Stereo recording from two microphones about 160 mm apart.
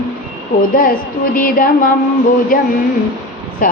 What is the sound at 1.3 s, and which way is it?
Music, 60° left (ahead or behind).